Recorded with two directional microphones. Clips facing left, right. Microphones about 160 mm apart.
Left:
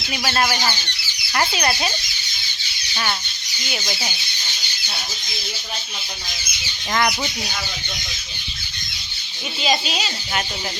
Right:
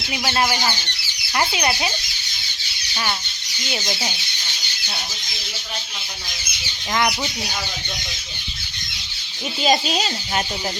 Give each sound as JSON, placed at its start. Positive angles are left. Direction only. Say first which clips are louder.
{"t": 0.1, "sound": "speech", "louder": "even", "side_deg": -20}
{"t": 2.9, "sound": "speech", "louder": "even", "side_deg": -10}
{"t": 9.6, "sound": "speech", "louder": "right 3 dB", "side_deg": -40}